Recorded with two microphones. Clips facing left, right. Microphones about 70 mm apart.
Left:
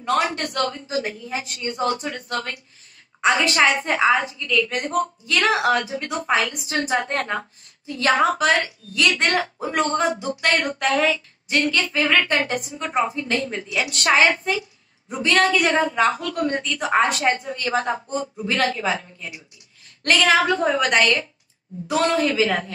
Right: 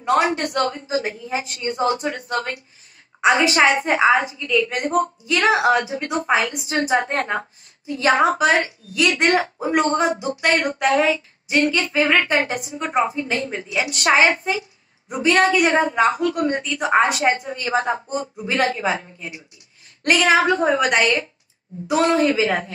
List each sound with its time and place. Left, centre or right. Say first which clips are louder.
0.0 s a man's voice: right 3 dB; right
13.8 s a woman's voice: right 1 dB; centre